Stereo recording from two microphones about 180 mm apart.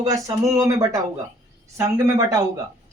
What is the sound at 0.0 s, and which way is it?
Speech, 20° right (ahead or behind).